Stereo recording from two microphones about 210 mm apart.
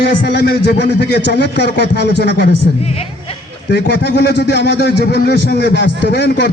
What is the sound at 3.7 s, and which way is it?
A man's voice, 55° left (ahead or behind).